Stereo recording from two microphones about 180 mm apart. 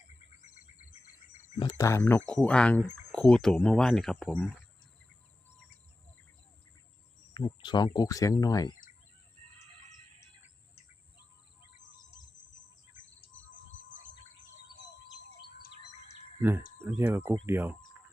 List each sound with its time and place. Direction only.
1.8 s speech: 15° left (ahead or behind)
7.3 s speech: 25° left (ahead or behind)
16.4 s speech: 10° right (ahead or behind)